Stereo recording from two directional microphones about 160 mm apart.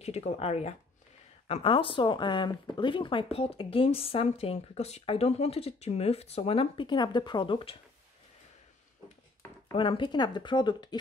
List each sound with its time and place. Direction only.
0.0 s speech: 45° left (ahead or behind)
9.8 s speech: 30° left (ahead or behind)